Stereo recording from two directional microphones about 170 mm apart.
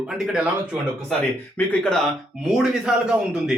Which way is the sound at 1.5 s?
10° left (ahead or behind).